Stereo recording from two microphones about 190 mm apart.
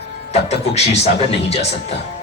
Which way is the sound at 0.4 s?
35° left (ahead or behind).